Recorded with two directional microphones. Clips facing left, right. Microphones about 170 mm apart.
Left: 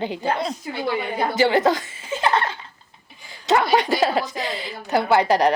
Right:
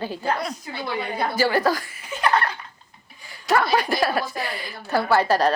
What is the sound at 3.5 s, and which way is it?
A woman's voice, 20° left (ahead or behind).